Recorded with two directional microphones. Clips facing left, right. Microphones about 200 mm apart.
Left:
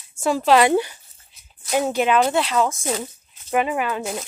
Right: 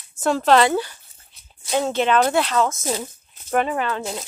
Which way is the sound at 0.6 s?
15° left (ahead or behind).